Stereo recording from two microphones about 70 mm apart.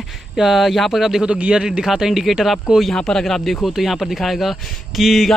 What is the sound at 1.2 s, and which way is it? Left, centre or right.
Speech, centre.